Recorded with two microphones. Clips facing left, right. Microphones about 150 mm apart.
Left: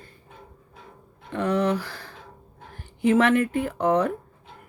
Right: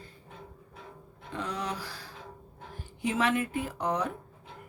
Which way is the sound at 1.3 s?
60° left (ahead or behind).